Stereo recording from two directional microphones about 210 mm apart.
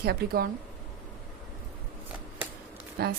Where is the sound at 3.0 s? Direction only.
45° right (ahead or behind).